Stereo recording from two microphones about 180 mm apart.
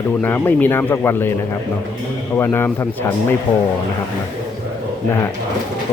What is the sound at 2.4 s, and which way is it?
Speech, 10° left (ahead or behind).